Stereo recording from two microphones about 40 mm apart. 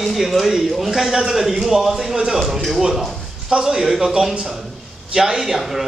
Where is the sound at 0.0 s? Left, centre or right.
Centre.